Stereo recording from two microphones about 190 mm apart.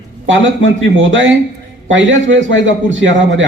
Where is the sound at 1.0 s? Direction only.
80° right.